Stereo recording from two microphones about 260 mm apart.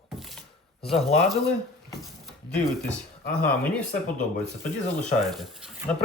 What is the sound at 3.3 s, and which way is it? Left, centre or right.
Speech, centre.